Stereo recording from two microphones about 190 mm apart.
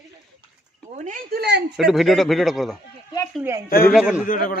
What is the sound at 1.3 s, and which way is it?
Speech, 60° right (ahead or behind).